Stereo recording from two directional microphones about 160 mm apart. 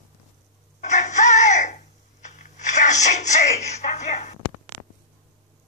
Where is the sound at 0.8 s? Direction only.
45° left (ahead or behind).